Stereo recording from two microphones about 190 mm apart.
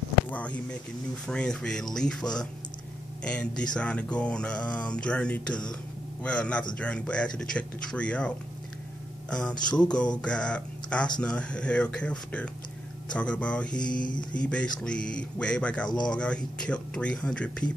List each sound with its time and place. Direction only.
0.3 s speech: 5° left (ahead or behind)
13.9 s mantra: 45° left (ahead or behind)
14.3 s speech: 5° left (ahead or behind)